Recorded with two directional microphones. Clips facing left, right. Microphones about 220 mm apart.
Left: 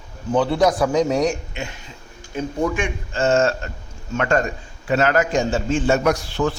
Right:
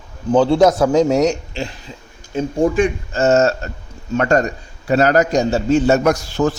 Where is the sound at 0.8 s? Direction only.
25° right (ahead or behind).